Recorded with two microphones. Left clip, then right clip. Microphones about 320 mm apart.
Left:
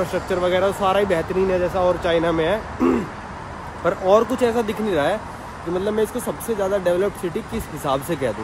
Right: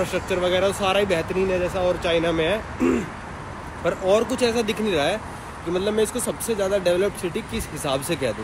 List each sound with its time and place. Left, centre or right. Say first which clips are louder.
0.1 s speech: left 2 dB; centre